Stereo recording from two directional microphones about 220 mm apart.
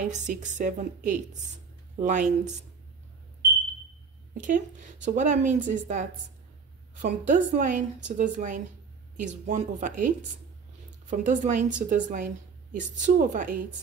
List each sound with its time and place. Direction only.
0.0 s speech: 35° right (ahead or behind)
4.3 s speech: 35° right (ahead or behind)